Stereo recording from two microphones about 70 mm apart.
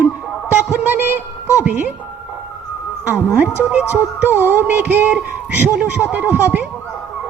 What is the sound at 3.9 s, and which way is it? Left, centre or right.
Music, right.